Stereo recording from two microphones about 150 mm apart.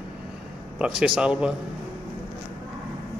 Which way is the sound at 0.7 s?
5° right (ahead or behind).